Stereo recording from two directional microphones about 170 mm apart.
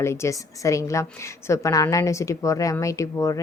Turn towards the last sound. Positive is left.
turn(degrees=20)  # may be behind; listen again after turning